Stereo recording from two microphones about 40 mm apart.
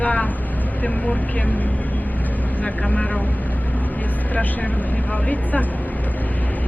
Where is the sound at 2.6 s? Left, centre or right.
Left.